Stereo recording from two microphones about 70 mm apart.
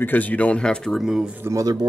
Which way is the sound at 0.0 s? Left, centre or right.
Left.